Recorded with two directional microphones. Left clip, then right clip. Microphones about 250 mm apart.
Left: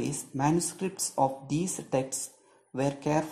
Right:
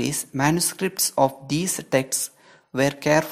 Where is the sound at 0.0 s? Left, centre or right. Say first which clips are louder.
Right 7 dB; right.